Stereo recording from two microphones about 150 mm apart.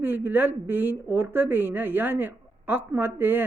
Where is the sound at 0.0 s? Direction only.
15° right (ahead or behind).